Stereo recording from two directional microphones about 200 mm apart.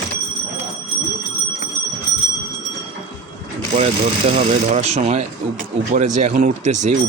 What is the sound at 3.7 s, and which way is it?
Speech, 30° right (ahead or behind).